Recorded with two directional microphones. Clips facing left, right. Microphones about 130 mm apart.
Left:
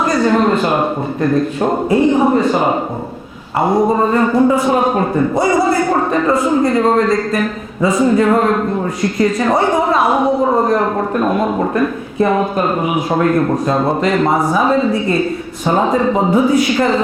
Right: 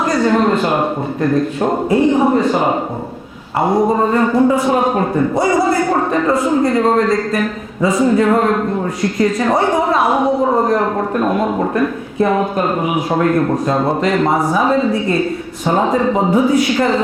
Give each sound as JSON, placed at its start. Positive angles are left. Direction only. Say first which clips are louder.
{"t": 0.0, "sound": "a woman's voice", "louder": "left 1 dB", "side_deg": 20}